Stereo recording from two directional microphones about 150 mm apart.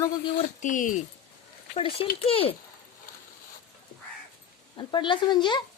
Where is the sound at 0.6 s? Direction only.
60° left (ahead or behind).